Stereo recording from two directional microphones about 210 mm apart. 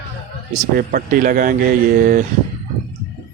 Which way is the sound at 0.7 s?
40° right (ahead or behind).